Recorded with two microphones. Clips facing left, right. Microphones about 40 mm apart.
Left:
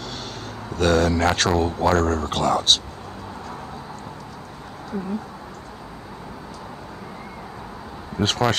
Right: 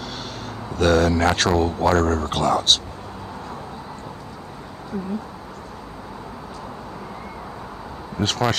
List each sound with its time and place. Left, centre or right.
0.7 s speech: centre
8.2 s speech: centre